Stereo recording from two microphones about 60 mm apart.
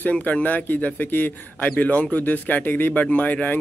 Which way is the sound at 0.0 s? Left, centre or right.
Left.